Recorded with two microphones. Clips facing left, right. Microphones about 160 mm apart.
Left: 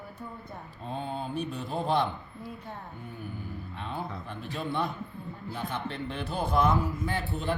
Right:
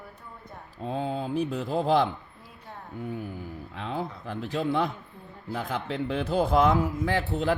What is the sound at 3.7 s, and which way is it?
A man's voice, 90° right.